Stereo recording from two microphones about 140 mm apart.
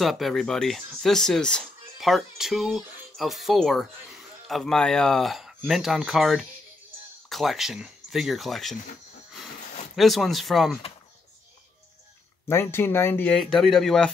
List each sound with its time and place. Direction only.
0.0 s speech: centre (ahead or behind)
9.9 s speech: centre (ahead or behind)
12.4 s speech: 15° left (ahead or behind)
13.4 s speech: centre (ahead or behind)